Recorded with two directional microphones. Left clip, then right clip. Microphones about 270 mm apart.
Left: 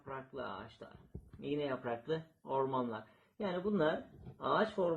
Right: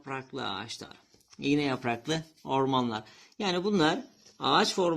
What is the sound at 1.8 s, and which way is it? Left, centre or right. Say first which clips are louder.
Speech: right 7 dB; right.